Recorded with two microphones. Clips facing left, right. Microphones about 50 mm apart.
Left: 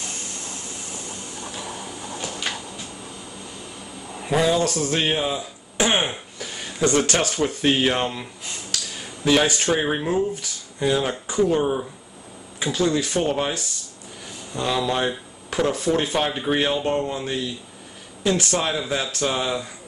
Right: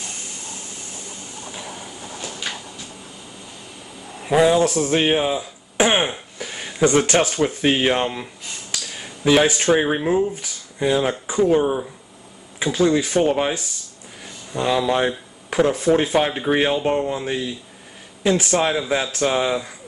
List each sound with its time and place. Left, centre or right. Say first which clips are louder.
4.3 s speech: right 4 dB; centre
6.3 s a sound: right 2 dB; right
7.0 s speech: right 3 dB; centre